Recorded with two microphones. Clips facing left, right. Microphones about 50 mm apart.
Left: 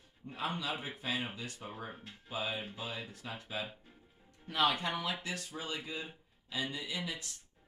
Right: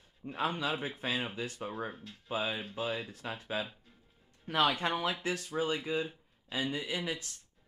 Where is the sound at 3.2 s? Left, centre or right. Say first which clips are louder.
Right 4 dB; right.